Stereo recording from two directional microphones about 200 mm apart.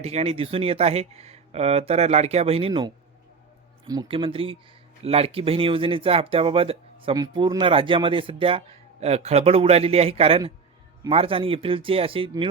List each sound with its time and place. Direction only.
0.0 s speech: 30° right (ahead or behind)